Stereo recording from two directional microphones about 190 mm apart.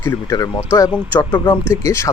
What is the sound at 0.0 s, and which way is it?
Speech, 20° left (ahead or behind).